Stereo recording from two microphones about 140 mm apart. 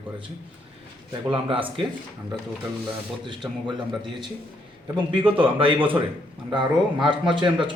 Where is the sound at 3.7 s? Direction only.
35° right (ahead or behind).